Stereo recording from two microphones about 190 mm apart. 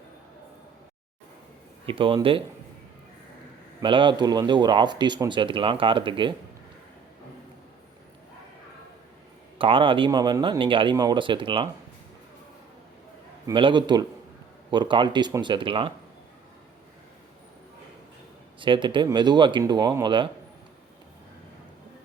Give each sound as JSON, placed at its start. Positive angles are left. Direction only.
{"t": 1.9, "sound": "speech", "side_deg": -25}
{"t": 3.8, "sound": "speech", "side_deg": -25}
{"t": 9.6, "sound": "speech", "side_deg": -25}
{"t": 13.5, "sound": "speech", "side_deg": -25}
{"t": 18.6, "sound": "speech", "side_deg": -25}